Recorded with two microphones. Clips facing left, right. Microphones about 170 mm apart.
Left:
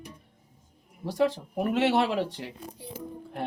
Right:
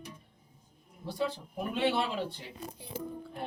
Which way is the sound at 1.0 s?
90° left.